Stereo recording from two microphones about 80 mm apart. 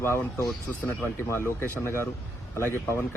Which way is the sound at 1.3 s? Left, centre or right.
Left.